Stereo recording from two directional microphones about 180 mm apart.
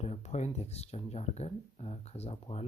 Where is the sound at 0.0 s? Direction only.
35° left (ahead or behind).